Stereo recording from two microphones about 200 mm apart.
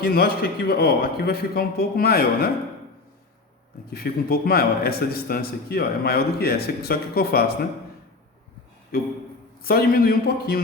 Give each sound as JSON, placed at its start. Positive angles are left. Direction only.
{"t": 0.0, "sound": "a man's voice", "side_deg": 50}
{"t": 3.8, "sound": "a man's voice", "side_deg": 50}
{"t": 8.9, "sound": "a man's voice", "side_deg": 50}